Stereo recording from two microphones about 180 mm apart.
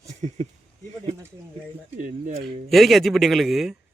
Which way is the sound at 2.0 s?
45° right (ahead or behind).